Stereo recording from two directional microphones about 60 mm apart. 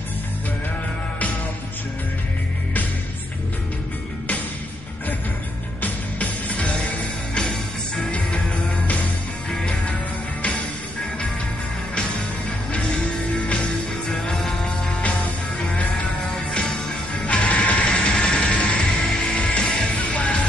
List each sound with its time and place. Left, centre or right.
5.8 s music: left
7.3 s music: centre
9.5 s music: centre
11.9 s music: centre
13.5 s music: centre
17.3 s music: centre
20.0 s music: left